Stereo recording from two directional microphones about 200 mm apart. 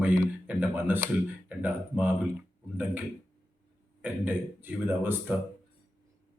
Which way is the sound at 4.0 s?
10° right (ahead or behind).